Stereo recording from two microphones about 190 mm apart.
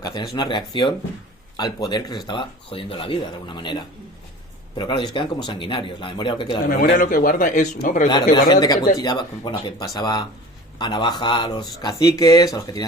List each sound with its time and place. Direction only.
0.0 s speech: 20° left (ahead or behind)
6.7 s speech: 50° left (ahead or behind)
8.0 s speech: 20° left (ahead or behind)